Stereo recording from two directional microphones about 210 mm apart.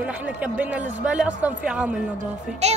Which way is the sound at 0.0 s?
5° right (ahead or behind).